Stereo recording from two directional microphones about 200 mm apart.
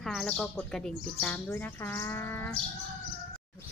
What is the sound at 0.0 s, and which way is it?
Speech, 5° left (ahead or behind).